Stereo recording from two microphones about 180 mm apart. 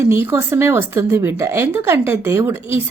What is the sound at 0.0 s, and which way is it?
A woman's voice, 15° right (ahead or behind).